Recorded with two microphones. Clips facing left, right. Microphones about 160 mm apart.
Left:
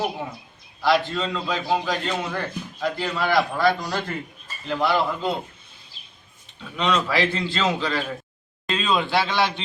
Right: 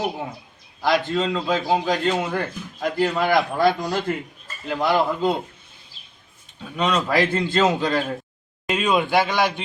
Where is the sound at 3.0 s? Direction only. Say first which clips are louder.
Right 4 dB; 50° right (ahead or behind).